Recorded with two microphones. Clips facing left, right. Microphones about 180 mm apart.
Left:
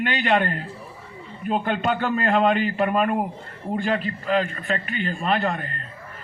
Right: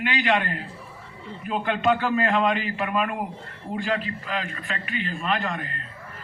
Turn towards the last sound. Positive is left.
turn(degrees=40)  # may be behind; listen again after turning